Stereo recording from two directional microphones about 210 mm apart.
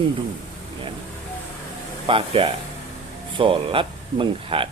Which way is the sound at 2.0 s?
25° right (ahead or behind).